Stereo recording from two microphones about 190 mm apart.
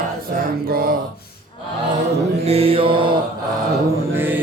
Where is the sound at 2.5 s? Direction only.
30° right (ahead or behind).